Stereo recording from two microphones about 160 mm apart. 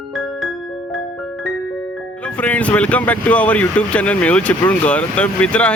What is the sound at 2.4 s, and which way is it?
Speech, 10° left (ahead or behind).